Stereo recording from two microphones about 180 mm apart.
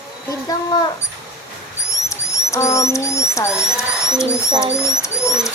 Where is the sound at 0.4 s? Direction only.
20° left (ahead or behind).